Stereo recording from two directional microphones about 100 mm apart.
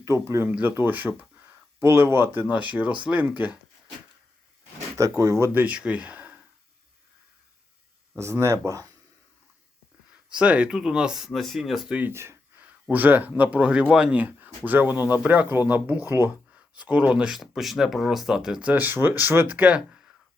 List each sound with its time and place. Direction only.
0.0 s speech: 30° right (ahead or behind)
4.9 s speech: 35° right (ahead or behind)
5.5 s speech: 15° right (ahead or behind)
8.1 s speech: 30° right (ahead or behind)
10.3 s speech: 10° right (ahead or behind)
11.9 s speech: 25° right (ahead or behind)